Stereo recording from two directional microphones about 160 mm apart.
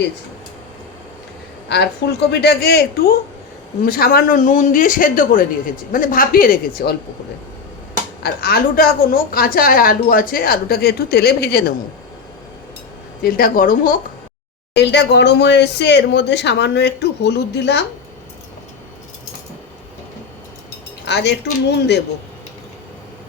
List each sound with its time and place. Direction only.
1.7 s speech: 90° left; by 6.9 s 65° left (ahead or behind)
8.2 s a woman's voice: 75° left (ahead or behind); by 11.7 s 90° left
13.2 s speech: 65° left (ahead or behind)
14.8 s speech: 90° left
21.0 s speech: 90° left